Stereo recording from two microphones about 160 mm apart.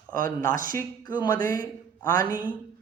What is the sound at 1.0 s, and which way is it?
Speech, 25° left (ahead or behind).